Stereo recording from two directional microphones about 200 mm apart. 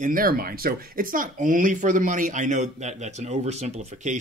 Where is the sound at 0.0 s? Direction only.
45° right (ahead or behind).